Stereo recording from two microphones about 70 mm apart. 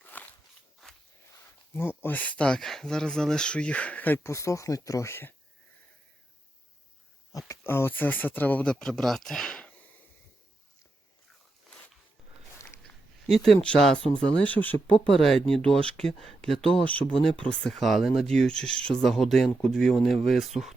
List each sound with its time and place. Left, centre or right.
0.0 s walk: left
1.7 s speech: left
4.2 s speech: left
7.3 s a sound: left
7.6 s speech: left
8.7 s speech: centre
11.7 s walk: centre
13.2 s speech: centre; by 14.9 s left
15.0 s speech: centre
16.8 s speech: left
17.7 s speech: centre
18.3 s speech: centre
19.0 s speech: centre